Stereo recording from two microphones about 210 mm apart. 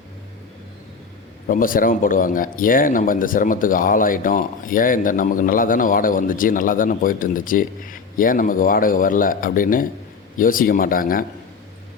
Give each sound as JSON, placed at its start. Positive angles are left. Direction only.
{"t": 1.5, "sound": "speech", "side_deg": 40}